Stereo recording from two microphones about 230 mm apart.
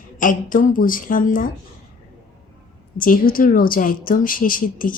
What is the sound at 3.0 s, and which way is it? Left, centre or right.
A woman's voice, left.